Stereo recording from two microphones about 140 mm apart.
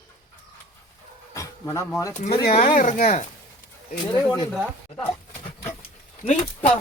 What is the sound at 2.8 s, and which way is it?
Speech, 70° left (ahead or behind).